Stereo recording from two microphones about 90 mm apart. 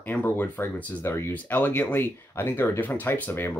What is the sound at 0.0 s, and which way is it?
Speech, 20° left (ahead or behind).